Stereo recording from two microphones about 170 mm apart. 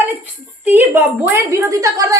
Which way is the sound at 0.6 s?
15° right (ahead or behind).